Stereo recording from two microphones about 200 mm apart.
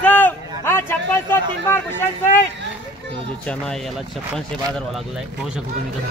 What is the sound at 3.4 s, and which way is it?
Speech, 5° left (ahead or behind).